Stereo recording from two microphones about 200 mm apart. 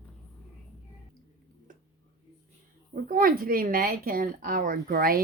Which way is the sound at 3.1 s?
45° right (ahead or behind).